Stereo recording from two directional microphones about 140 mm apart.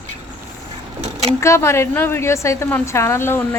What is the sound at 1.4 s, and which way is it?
A woman's voice, 20° left (ahead or behind).